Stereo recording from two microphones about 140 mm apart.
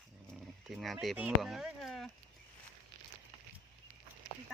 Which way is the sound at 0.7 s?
Centre (ahead or behind).